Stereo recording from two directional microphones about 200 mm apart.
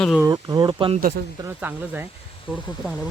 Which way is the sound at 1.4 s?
10° right (ahead or behind).